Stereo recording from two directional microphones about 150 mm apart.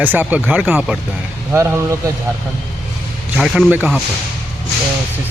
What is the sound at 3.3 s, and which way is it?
Speech, centre (ahead or behind).